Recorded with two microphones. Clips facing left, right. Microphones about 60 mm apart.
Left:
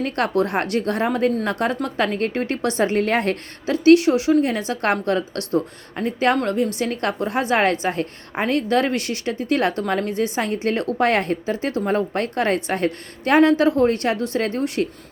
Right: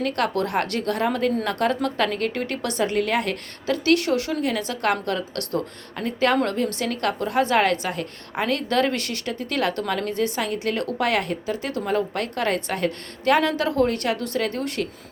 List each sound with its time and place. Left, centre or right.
0.0 s a woman's voice: left
3.7 s a woman's voice: centre
4.4 s a woman's voice: left